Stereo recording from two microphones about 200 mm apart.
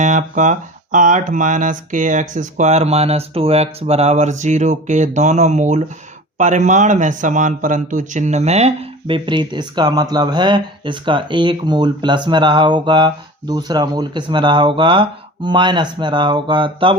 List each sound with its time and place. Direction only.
0.0 s a man's voice: 40° right (ahead or behind)